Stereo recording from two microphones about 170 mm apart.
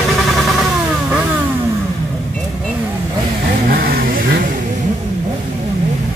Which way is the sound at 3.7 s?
55° right (ahead or behind).